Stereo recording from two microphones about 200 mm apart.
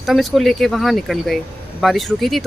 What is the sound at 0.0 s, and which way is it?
Speech, centre (ahead or behind).